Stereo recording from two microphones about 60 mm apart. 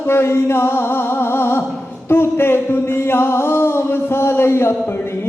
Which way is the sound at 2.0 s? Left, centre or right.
Left.